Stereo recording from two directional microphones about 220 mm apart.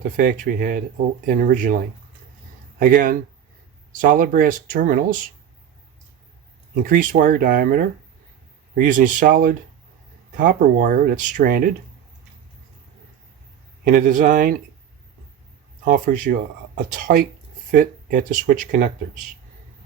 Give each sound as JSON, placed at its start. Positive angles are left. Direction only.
{"t": 0.2, "sound": "speech", "side_deg": -40}
{"t": 6.8, "sound": "speech", "side_deg": -40}
{"t": 13.8, "sound": "speech", "side_deg": -40}
{"t": 15.8, "sound": "speech", "side_deg": -40}